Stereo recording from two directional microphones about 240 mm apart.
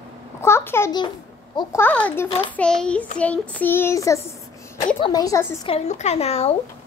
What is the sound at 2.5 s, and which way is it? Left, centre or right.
Speech, centre.